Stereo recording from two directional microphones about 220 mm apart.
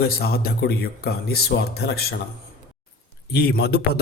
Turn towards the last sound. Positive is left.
turn(degrees=45)  # may be behind; listen again after turning